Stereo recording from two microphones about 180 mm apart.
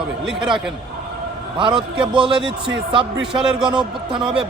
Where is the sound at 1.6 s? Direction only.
30° right (ahead or behind).